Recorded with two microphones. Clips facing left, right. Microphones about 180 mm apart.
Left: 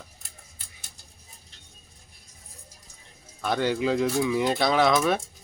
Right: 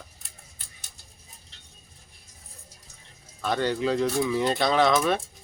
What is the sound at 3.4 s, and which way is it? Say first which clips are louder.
Speech: left 1 dB; 5° left (ahead or behind).